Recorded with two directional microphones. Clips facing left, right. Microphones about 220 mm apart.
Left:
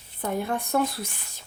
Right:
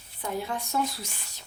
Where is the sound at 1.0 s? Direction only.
50° left (ahead or behind).